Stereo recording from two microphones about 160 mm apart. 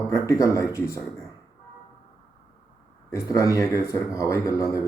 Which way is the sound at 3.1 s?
20° left (ahead or behind).